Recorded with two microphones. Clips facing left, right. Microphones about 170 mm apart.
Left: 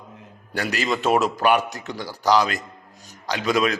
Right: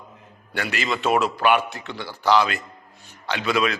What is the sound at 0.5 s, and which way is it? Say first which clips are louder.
A man's voice: left 2 dB; 40° left (ahead or behind).